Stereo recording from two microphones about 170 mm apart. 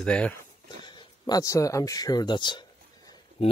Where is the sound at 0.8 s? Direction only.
25° left (ahead or behind).